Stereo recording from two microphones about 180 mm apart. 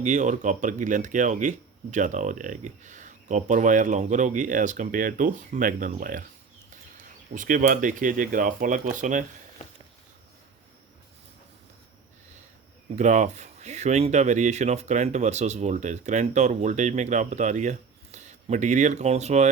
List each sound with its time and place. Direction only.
0.0 s speech: 45° right (ahead or behind)
7.3 s speech: 45° right (ahead or behind)
13.0 s speech: 40° right (ahead or behind)